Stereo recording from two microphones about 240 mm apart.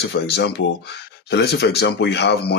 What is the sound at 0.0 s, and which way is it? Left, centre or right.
Speech, left.